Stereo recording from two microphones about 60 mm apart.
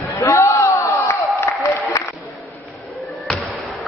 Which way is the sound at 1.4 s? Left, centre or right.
Left.